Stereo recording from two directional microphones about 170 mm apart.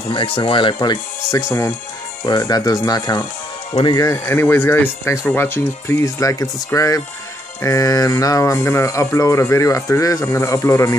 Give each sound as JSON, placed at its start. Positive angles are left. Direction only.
{"t": 0.1, "sound": "speech", "side_deg": 30}